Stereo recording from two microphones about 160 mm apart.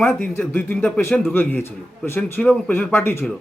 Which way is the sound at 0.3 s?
10° left (ahead or behind).